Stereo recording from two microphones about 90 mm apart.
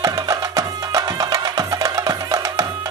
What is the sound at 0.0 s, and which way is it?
Music, 40° right (ahead or behind).